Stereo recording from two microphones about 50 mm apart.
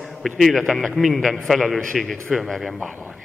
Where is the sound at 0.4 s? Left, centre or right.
Centre.